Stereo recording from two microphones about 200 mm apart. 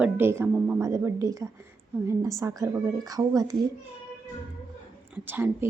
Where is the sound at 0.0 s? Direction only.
10° right (ahead or behind).